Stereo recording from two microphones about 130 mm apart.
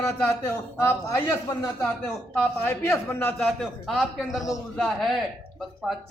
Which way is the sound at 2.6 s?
20° left (ahead or behind).